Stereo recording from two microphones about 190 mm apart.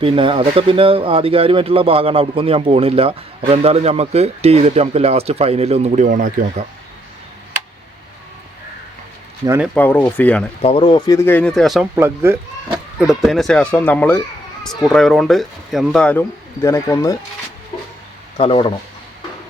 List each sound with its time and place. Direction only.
0.0 s speech: 25° right (ahead or behind); by 6.7 s 45° right (ahead or behind)
9.7 s speech: 10° left (ahead or behind)
10.6 s speech: 30° left (ahead or behind); by 11.9 s centre (ahead or behind)
11.9 s speech: 15° right (ahead or behind)
12.7 s speech: 5° right (ahead or behind); by 17.2 s 15° left (ahead or behind)
18.3 s speech: 25° left (ahead or behind)